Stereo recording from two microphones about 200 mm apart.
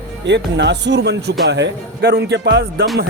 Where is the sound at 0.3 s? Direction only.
60° right (ahead or behind).